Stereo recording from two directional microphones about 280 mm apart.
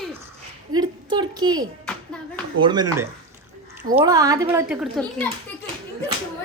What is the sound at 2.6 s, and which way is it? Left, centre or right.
A child's voice, centre.